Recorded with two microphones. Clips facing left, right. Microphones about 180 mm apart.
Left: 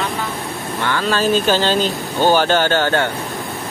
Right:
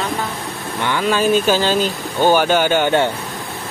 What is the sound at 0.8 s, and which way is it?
Speech, 15° right (ahead or behind).